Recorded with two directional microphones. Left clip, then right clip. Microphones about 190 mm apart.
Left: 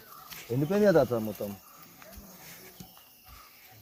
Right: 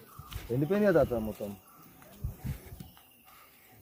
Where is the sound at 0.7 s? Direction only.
55° left (ahead or behind).